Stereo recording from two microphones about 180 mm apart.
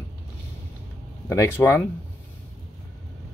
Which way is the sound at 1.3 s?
15° left (ahead or behind).